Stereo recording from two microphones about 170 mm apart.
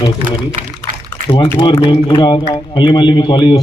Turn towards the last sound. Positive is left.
turn(degrees=25)  # may be behind; listen again after turning